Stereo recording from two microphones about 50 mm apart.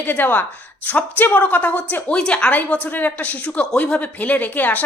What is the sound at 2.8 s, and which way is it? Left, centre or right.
A woman's voice, left.